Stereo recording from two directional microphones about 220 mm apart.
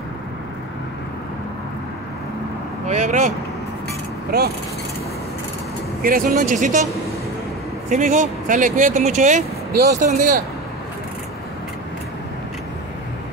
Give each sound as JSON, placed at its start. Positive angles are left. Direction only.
{"t": 2.9, "sound": "speech", "side_deg": -35}
{"t": 4.3, "sound": "speech", "side_deg": -45}
{"t": 6.0, "sound": "speech", "side_deg": -40}
{"t": 7.9, "sound": "speech", "side_deg": -35}